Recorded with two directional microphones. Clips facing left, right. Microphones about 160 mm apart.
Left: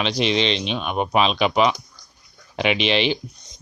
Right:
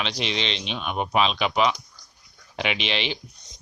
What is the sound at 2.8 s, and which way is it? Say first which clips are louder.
Speech: left 8 dB; 55° left (ahead or behind).